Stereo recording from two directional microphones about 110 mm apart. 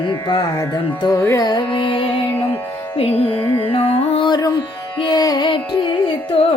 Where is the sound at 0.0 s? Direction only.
45° left (ahead or behind).